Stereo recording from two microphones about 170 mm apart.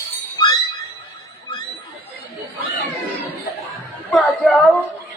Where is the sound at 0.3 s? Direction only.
25° left (ahead or behind).